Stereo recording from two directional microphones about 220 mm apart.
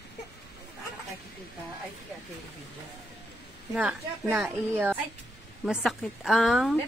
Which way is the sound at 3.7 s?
5° right (ahead or behind).